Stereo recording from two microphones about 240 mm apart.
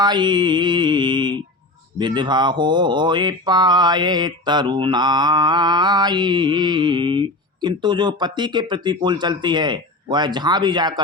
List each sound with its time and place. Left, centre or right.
0.0 s speech: centre